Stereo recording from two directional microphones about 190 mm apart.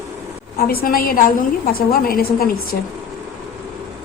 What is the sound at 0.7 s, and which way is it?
A woman's voice, 50° left (ahead or behind).